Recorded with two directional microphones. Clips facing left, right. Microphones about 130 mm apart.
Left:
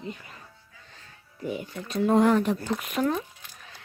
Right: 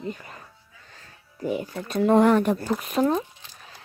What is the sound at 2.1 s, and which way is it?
Speech, 60° right (ahead or behind).